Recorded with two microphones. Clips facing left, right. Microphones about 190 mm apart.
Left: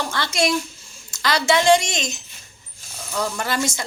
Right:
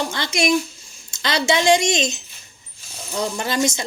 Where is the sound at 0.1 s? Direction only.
15° right (ahead or behind).